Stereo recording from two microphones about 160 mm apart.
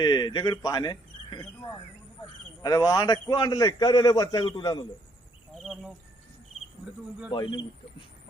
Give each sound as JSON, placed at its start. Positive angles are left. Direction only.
{"t": 0.0, "sound": "a man's voice", "side_deg": 25}
{"t": 5.5, "sound": "insect", "side_deg": 0}
{"t": 7.3, "sound": "a man's voice", "side_deg": 30}